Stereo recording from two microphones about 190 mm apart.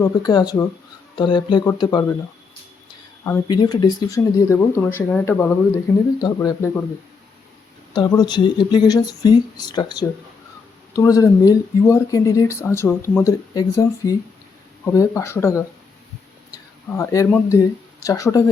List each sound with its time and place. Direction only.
0.0 s speech: 20° left (ahead or behind)
3.4 s speech: 20° left (ahead or behind)
7.9 s speech: 20° left (ahead or behind)
17.0 s speech: 15° left (ahead or behind)